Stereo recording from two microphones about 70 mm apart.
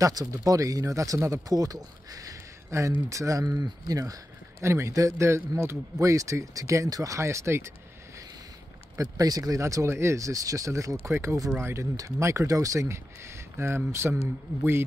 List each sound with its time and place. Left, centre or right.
0.0 s speech: right
4.6 s speech: right
5.9 s speech: right
8.9 s speech: right
11.1 s speech: right